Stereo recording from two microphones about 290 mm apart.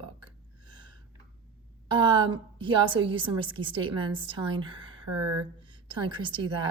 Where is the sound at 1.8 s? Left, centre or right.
Centre.